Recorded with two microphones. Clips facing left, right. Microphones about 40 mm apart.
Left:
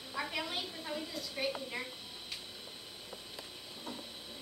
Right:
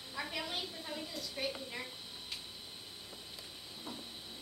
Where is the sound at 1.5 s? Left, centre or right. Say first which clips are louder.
Left 3 dB; centre.